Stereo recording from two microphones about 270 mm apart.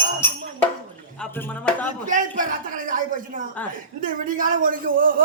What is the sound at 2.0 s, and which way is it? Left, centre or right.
A man's voice, right.